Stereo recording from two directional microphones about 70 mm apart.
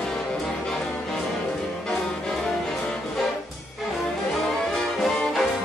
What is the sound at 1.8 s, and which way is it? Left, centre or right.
Music, centre.